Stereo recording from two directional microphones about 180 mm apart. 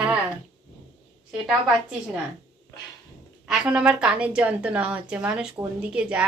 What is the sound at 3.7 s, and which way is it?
A woman's voice, 5° right (ahead or behind).